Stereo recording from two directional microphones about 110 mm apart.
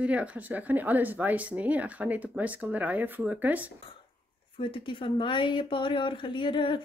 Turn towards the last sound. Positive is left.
turn(degrees=50)  # may be behind; listen again after turning